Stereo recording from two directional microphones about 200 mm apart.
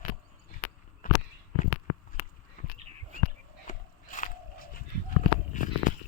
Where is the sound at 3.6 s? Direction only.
40° left (ahead or behind).